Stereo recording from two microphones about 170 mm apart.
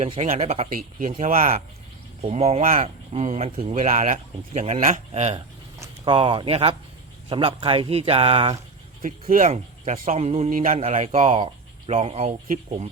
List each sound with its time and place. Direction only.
0.0 s speech: 40° right (ahead or behind)
0.8 s speech: 55° right (ahead or behind)
2.2 s speech: 40° right (ahead or behind)
2.6 s speech: 55° right (ahead or behind)
3.1 s speech: 40° right (ahead or behind)
3.8 s speech: 50° right (ahead or behind)
6.1 s speech: 30° right (ahead or behind)
9.2 s speech: 55° right (ahead or behind)
9.5 s speech: 40° right (ahead or behind)
10.5 s speech: 55° right (ahead or behind)
10.8 s speech: 40° right (ahead or behind)